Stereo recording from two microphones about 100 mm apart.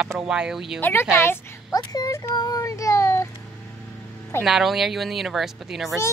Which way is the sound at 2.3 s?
40° left (ahead or behind).